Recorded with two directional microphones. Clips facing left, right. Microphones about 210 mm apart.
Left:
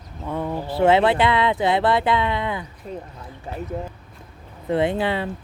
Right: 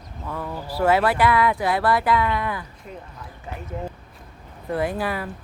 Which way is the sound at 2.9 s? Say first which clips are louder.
Left 5 dB; 35° left (ahead or behind).